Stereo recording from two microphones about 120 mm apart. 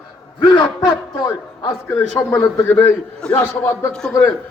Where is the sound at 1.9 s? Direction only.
15° left (ahead or behind).